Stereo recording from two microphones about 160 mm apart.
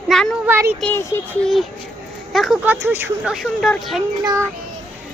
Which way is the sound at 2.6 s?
10° right (ahead or behind).